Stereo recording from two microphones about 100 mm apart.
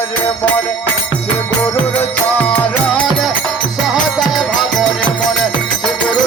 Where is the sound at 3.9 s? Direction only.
Centre (ahead or behind).